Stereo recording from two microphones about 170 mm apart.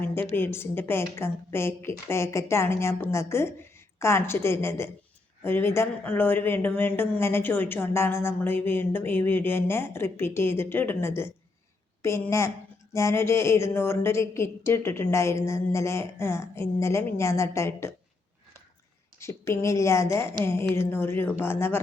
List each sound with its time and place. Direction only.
0.0 s a woman's voice: 10° left (ahead or behind)
19.2 s speech: 15° left (ahead or behind)